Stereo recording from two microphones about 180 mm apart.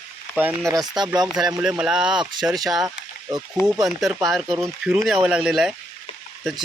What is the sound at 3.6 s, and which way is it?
Speech, 15° left (ahead or behind).